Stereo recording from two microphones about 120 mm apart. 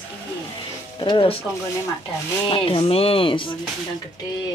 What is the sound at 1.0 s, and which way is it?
Speech, 40° left (ahead or behind).